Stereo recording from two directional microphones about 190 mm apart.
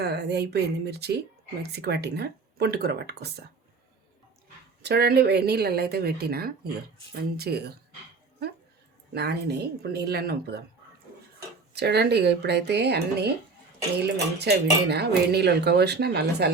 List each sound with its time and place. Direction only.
0.0 s speech: 60° right (ahead or behind)
4.8 s speech: 60° right (ahead or behind)
9.1 s speech: 60° right (ahead or behind)
11.7 s speech: 60° right (ahead or behind)
14.3 s speech: 60° right (ahead or behind)